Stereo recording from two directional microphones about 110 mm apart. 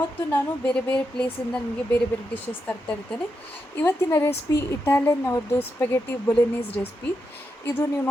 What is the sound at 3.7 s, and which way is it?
Speech, 20° left (ahead or behind).